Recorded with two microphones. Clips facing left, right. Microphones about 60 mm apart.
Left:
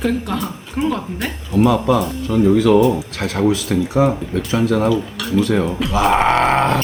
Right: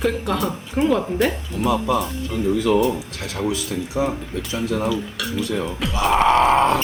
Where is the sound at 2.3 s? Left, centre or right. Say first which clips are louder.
Left 7 dB; left.